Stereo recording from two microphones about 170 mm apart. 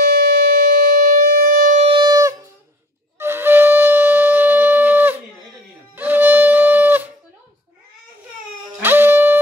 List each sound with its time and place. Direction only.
0.0 s wind instrument: 60° right (ahead or behind)
1.9 s shofar: 25° right (ahead or behind)
3.2 s wind instrument: 15° right (ahead or behind)
5.9 s music: 10° right (ahead or behind)
8.8 s music: 10° right (ahead or behind)